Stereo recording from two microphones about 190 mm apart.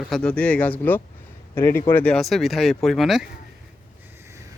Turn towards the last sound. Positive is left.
turn(degrees=0)  # may be behind; listen again after turning